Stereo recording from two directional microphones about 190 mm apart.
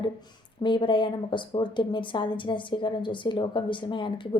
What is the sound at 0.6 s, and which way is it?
A woman's voice, 25° left (ahead or behind).